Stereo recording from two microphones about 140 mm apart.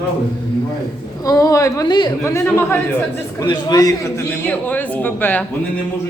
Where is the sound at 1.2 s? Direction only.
25° left (ahead or behind).